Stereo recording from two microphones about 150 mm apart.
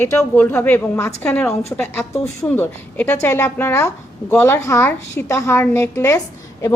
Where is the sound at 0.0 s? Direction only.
15° left (ahead or behind).